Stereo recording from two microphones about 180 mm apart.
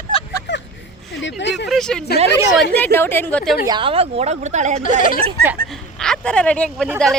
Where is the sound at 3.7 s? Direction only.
30° right (ahead or behind).